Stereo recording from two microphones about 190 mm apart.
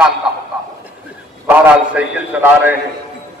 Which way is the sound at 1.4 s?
10° right (ahead or behind).